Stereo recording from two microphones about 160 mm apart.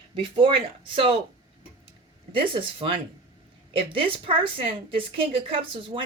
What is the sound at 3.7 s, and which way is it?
A woman's voice, 35° right (ahead or behind).